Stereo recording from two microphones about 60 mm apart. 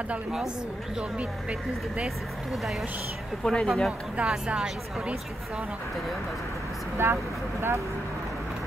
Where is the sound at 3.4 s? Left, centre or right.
Centre.